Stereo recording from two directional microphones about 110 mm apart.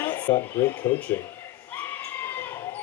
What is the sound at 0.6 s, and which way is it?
Speech, 20° left (ahead or behind).